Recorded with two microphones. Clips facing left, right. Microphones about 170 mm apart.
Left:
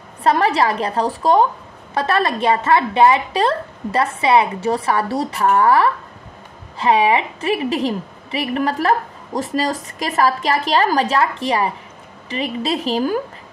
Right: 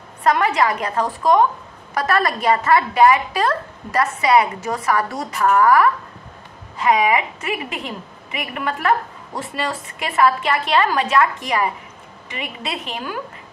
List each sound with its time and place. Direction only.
0.2 s a woman's voice: 30° left (ahead or behind)